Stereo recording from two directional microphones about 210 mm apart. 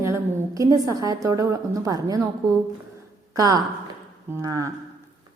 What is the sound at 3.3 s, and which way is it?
A woman's voice, 15° right (ahead or behind).